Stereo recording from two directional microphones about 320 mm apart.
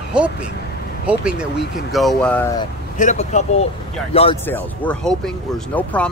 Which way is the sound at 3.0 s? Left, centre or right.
Left.